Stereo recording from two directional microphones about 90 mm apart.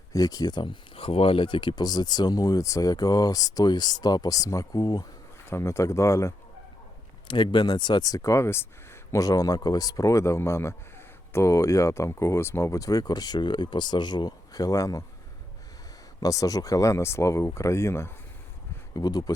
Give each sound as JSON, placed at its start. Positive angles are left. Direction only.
{"t": 0.1, "sound": "speech", "side_deg": 45}
{"t": 0.6, "sound": "speech", "side_deg": 80}
{"t": 5.5, "sound": "speech", "side_deg": 30}
{"t": 7.3, "sound": "speech", "side_deg": 60}
{"t": 9.2, "sound": "speech", "side_deg": 45}
{"t": 16.2, "sound": "speech", "side_deg": 40}
{"t": 18.9, "sound": "speech", "side_deg": 45}